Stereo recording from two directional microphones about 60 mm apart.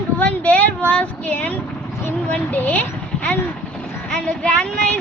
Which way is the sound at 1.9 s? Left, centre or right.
Left.